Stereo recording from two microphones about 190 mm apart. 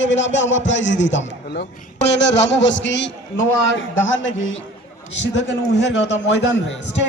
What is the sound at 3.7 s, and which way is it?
Speech, 80° left.